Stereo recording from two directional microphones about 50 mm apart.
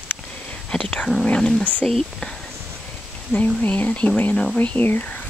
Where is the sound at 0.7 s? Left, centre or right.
Centre.